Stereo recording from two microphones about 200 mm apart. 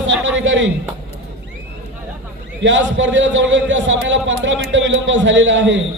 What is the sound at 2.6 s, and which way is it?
A man's voice, 65° right (ahead or behind).